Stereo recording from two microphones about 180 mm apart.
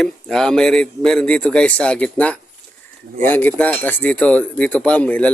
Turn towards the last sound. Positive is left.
turn(degrees=5)  # may be behind; listen again after turning